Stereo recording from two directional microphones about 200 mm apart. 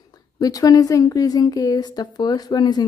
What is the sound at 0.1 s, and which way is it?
A woman's voice, 20° left (ahead or behind).